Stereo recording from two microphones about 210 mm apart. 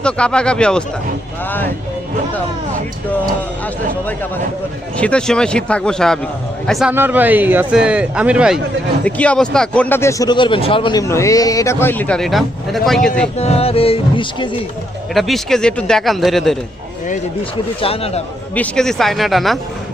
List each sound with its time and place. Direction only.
0.0 s a man's voice: 5° left (ahead or behind)
4.9 s a man's voice: 5° left (ahead or behind)
13.3 s speech: 30° left (ahead or behind)
15.1 s a man's voice: centre (ahead or behind)
17.7 s speech: 25° left (ahead or behind)
18.5 s a man's voice: 5° left (ahead or behind)